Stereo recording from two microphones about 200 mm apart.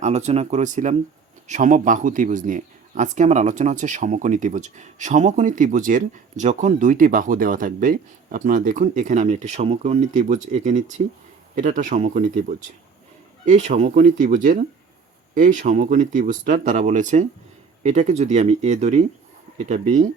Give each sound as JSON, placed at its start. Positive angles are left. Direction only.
{"t": 0.0, "sound": "speech", "side_deg": -35}